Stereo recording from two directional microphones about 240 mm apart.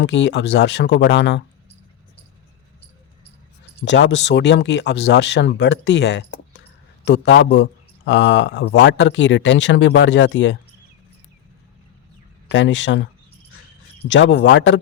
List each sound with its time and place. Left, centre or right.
0.0 s speech: left
3.8 s a man's voice: left
12.5 s speech: left
14.1 s speech: left